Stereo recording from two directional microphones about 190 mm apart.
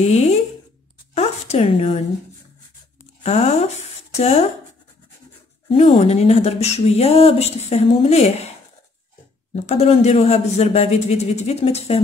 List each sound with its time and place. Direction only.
0.0 s speech: 35° left (ahead or behind)
3.3 s speech: 35° left (ahead or behind)
5.7 s speech: 35° left (ahead or behind)
9.6 s speech: 35° left (ahead or behind)